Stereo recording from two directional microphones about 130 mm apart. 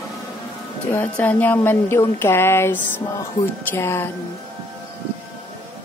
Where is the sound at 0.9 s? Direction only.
15° left (ahead or behind).